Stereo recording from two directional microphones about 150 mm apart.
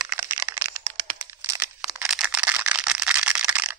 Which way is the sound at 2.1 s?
5° right (ahead or behind).